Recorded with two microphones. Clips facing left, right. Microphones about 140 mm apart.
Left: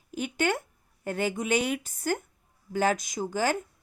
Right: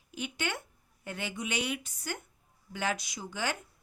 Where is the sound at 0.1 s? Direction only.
45° left (ahead or behind).